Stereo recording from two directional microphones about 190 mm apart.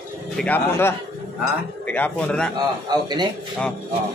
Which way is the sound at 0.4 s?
10° left (ahead or behind).